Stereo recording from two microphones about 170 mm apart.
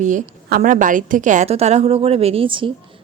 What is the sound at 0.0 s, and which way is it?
A woman's voice, 50° right (ahead or behind).